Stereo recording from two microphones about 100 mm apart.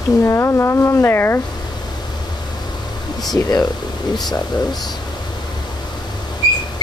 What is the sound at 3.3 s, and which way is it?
Speech, 40° left (ahead or behind).